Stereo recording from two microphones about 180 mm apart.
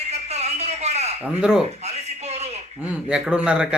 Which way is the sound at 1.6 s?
35° right (ahead or behind).